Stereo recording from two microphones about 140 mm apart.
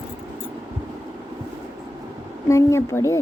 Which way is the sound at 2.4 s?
20° left (ahead or behind).